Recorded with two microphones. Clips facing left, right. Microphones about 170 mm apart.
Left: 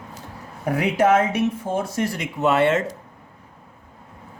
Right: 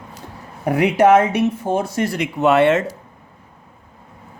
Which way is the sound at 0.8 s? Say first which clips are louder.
Right 5 dB; 75° right (ahead or behind).